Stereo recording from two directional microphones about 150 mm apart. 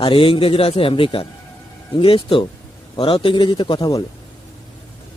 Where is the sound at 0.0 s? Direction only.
35° left (ahead or behind).